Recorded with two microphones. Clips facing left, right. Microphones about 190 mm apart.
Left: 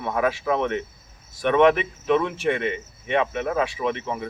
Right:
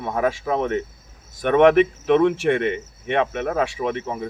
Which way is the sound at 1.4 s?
50° right (ahead or behind).